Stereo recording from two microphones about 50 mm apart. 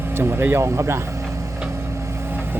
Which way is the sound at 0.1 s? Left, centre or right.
Right.